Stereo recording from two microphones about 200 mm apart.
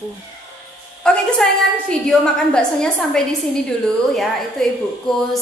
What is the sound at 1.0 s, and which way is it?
A woman's voice, 5° left (ahead or behind).